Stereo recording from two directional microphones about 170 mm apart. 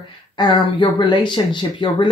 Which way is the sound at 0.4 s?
25° left (ahead or behind).